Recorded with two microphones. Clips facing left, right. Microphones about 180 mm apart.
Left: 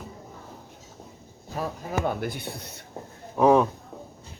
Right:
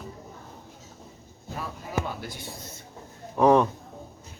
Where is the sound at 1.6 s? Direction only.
55° left (ahead or behind).